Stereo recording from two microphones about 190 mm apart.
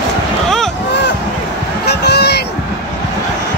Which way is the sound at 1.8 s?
60° left (ahead or behind).